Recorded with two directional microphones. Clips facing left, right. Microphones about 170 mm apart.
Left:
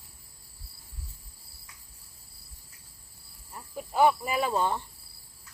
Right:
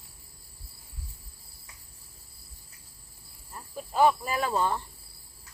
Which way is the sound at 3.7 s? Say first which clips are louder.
Even; 15° left (ahead or behind).